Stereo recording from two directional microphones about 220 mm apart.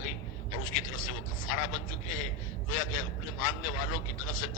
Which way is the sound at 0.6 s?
65° left (ahead or behind).